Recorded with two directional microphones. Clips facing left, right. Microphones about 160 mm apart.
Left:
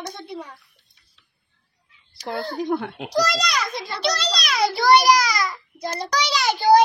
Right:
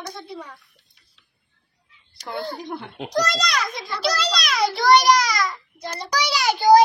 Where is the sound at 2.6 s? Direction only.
55° left (ahead or behind).